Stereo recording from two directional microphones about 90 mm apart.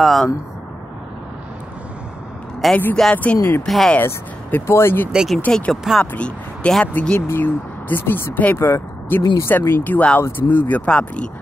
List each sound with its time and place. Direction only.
0.0 s speech: centre (ahead or behind)
2.7 s speech: 20° left (ahead or behind)
3.6 s speech: 5° left (ahead or behind)
4.0 s speech: 25° left (ahead or behind)
5.1 s speech: 5° right (ahead or behind)
5.5 s speech: 5° left (ahead or behind)